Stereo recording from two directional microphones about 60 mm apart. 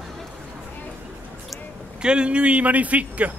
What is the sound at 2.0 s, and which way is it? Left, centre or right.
Speech, centre.